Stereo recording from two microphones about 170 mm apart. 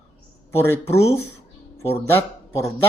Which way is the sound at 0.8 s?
35° left (ahead or behind).